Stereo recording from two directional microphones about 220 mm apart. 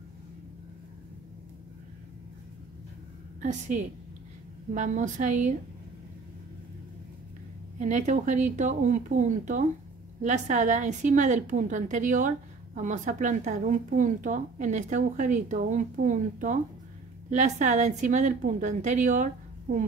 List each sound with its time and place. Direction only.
3.4 s a woman's voice: 35° right (ahead or behind)
7.8 s a woman's voice: 35° right (ahead or behind)